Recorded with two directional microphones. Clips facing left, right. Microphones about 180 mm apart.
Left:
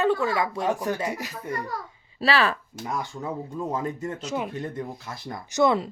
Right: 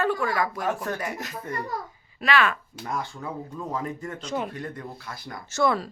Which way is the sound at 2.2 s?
35° left (ahead or behind).